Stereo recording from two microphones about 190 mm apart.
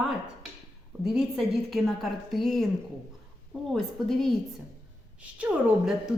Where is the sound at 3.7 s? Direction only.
Centre (ahead or behind).